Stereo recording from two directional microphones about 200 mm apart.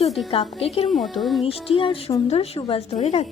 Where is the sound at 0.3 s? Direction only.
30° left (ahead or behind).